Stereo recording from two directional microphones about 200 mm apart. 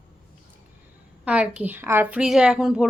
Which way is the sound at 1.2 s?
5° right (ahead or behind).